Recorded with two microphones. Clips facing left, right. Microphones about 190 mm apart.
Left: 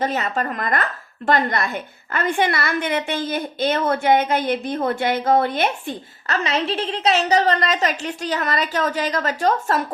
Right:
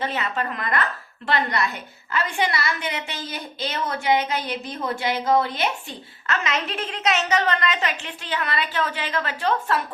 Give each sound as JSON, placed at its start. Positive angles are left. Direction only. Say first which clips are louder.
{"t": 0.0, "sound": "a woman's voice", "louder": "left 4 dB", "side_deg": 45}
{"t": 6.2, "sound": "a woman's voice", "louder": "left 4 dB", "side_deg": 35}